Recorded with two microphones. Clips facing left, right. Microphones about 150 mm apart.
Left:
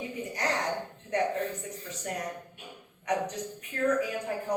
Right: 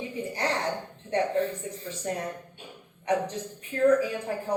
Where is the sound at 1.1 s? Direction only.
30° right (ahead or behind).